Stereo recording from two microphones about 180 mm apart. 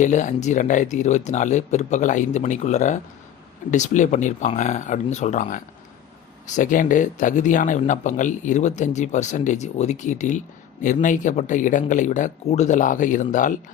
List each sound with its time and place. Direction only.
0.0 s speech: 40° left (ahead or behind)